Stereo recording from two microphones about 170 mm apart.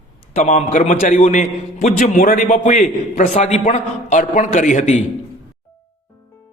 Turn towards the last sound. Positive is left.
turn(degrees=45)  # may be behind; listen again after turning